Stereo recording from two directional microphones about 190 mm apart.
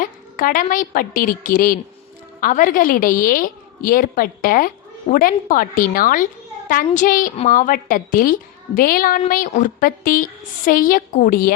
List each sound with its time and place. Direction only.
0.0 s a woman's voice: 45° left (ahead or behind)